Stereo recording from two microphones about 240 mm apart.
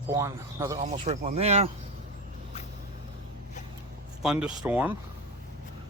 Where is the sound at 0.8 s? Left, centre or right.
Right.